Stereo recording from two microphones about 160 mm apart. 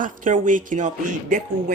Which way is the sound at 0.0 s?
55° right (ahead or behind).